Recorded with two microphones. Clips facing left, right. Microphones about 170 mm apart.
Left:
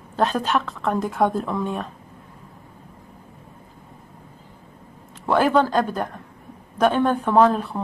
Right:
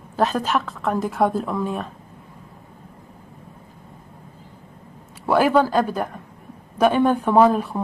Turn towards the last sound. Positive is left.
turn(degrees=-10)  # may be behind; listen again after turning